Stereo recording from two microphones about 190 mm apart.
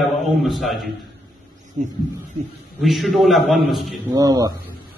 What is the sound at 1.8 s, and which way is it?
Speech, 40° right (ahead or behind).